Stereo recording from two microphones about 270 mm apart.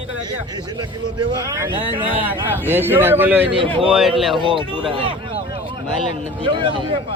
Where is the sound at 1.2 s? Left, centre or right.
Centre.